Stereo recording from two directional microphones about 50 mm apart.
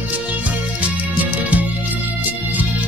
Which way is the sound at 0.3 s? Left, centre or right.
Right.